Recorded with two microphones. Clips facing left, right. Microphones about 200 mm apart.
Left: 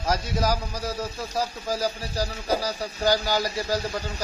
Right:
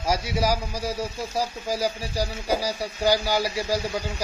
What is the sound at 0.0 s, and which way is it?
A man's voice, 10° right (ahead or behind).